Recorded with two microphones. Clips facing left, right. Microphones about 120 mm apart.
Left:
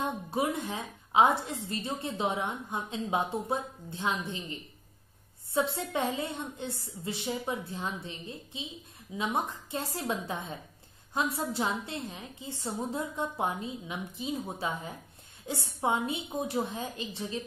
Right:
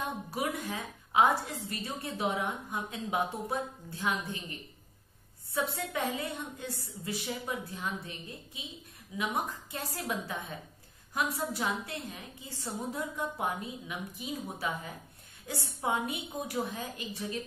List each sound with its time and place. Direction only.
0.0 s a woman's voice: 25° left (ahead or behind)